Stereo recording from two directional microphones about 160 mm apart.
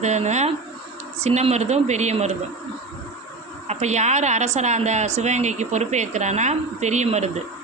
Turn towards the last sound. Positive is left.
turn(degrees=-45)  # may be behind; listen again after turning